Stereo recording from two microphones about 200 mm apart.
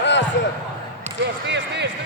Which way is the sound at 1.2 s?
60° right (ahead or behind).